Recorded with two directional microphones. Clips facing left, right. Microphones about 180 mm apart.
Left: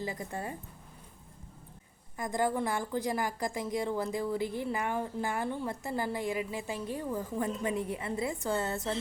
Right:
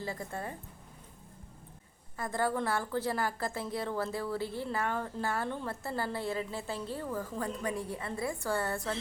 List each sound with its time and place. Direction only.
0.0 s a woman's voice: 15° left (ahead or behind)
2.1 s a woman's voice: 15° left (ahead or behind)